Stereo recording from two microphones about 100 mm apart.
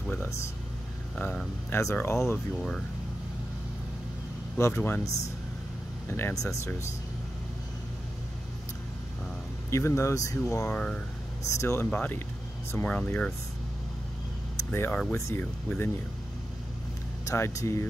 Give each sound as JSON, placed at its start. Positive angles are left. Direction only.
{"t": 0.0, "sound": "a sound", "side_deg": 15}
{"t": 1.7, "sound": "speech", "side_deg": 30}
{"t": 4.6, "sound": "speech", "side_deg": 30}
{"t": 6.0, "sound": "speech", "side_deg": 25}
{"t": 9.7, "sound": "speech", "side_deg": 30}
{"t": 10.7, "sound": "speech", "side_deg": 10}
{"t": 11.4, "sound": "speech", "side_deg": 25}
{"t": 14.6, "sound": "speech", "side_deg": 25}
{"t": 17.3, "sound": "speech", "side_deg": 30}